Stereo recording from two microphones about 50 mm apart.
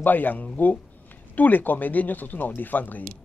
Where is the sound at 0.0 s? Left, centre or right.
Left.